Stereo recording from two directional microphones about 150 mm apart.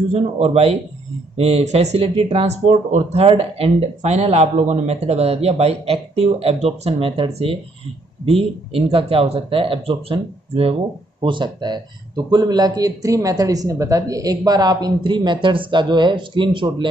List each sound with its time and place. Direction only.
0.1 s speech: 45° right (ahead or behind)